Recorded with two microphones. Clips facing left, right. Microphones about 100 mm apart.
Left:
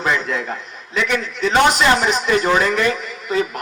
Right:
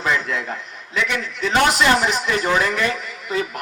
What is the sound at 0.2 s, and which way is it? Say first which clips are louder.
A man's voice: left 2 dB; 20° left (ahead or behind).